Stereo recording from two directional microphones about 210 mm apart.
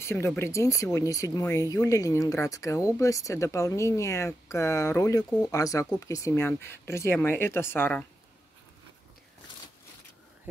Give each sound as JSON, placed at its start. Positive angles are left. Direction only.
{"t": 0.0, "sound": "speech", "side_deg": 10}